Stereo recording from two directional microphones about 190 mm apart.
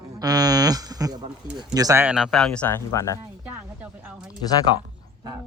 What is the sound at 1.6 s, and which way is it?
Speech, 20° right (ahead or behind).